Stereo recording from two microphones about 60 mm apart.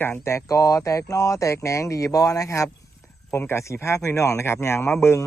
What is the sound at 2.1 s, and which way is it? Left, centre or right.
Speech, left.